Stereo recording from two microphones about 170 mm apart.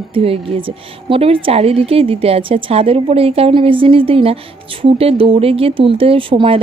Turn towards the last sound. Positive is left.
turn(degrees=-30)  # may be behind; listen again after turning